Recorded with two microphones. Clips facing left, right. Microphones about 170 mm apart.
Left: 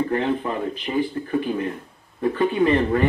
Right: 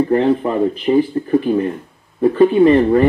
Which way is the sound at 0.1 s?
35° right (ahead or behind).